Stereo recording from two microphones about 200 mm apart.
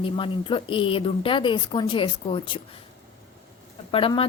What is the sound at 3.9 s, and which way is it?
Speech, 25° left (ahead or behind).